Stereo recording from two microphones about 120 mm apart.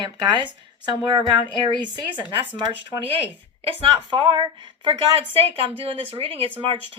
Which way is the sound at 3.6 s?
50° right (ahead or behind).